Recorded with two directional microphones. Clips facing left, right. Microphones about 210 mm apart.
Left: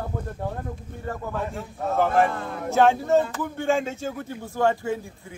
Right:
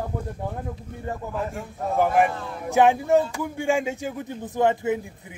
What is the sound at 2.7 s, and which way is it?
A man's voice, 15° right (ahead or behind).